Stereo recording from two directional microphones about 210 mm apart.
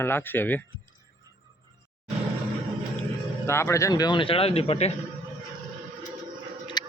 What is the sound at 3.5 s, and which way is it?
Speech, 15° left (ahead or behind).